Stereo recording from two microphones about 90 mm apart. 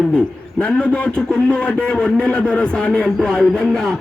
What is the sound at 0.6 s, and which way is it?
A man's voice, 10° left (ahead or behind).